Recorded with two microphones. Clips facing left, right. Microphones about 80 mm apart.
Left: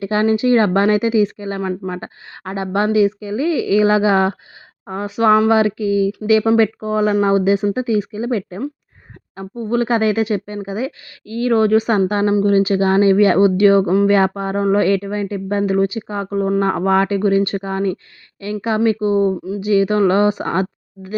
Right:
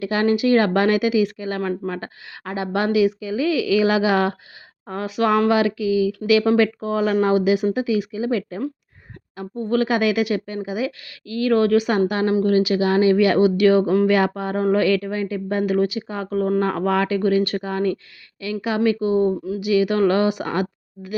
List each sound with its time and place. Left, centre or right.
0.0 s speech: left
2.3 s speech: left